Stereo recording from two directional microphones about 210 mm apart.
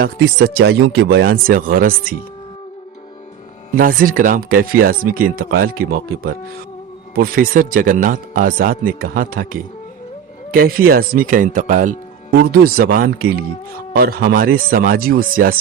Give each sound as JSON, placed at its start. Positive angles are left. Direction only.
{"t": 0.0, "sound": "speech", "side_deg": -45}
{"t": 3.8, "sound": "speech", "side_deg": -40}